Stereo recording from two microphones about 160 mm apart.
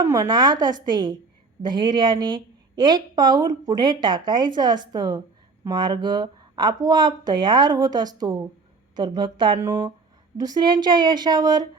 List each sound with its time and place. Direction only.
0.0 s a woman's voice: 20° right (ahead or behind)
9.6 s a woman's voice: 20° right (ahead or behind)